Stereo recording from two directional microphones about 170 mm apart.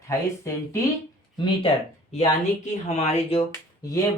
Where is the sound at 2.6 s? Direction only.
40° left (ahead or behind).